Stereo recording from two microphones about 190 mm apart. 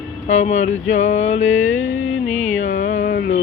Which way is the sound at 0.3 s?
35° left (ahead or behind).